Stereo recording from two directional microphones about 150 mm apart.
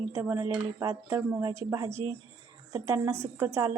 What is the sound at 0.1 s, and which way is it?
A woman's voice, 15° right (ahead or behind).